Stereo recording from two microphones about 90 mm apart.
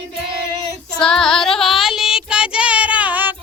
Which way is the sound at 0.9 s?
10° left (ahead or behind).